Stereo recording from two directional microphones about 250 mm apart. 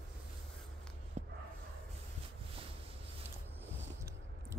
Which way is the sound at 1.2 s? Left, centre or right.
Right.